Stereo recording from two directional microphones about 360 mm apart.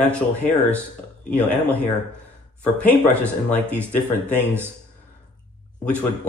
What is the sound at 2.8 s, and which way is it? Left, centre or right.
Speech, centre.